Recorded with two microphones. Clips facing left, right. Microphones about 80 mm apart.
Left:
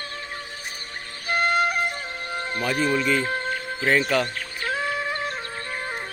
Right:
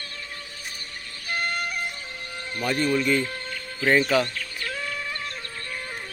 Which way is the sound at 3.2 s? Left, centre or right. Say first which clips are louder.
Left 8 dB; left.